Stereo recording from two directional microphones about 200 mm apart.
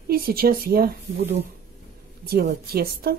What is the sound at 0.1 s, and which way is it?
Speech, 50° right (ahead or behind).